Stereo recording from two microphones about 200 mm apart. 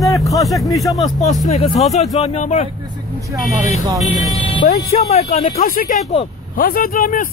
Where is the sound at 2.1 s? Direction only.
30° left (ahead or behind).